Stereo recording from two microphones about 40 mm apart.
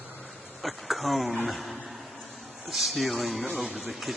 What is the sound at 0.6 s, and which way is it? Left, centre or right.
Speech, centre.